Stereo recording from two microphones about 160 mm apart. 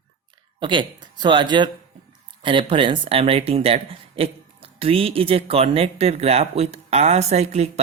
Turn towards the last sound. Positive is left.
turn(degrees=-40)  # may be behind; listen again after turning